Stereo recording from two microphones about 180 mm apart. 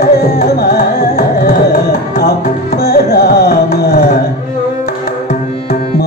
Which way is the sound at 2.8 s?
60° left (ahead or behind).